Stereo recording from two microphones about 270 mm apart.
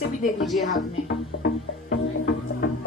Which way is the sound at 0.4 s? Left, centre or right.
Centre.